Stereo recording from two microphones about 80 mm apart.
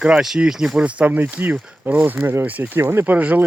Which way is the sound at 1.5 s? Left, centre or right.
Centre.